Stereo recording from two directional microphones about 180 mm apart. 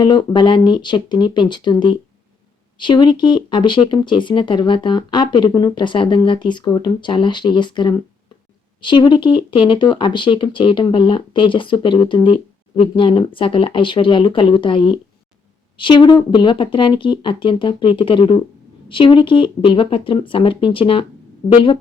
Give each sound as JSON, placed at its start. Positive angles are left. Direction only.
{"t": 0.0, "sound": "speech", "side_deg": 25}